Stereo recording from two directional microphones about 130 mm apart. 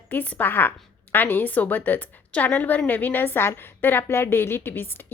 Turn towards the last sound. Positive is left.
turn(degrees=15)  # may be behind; listen again after turning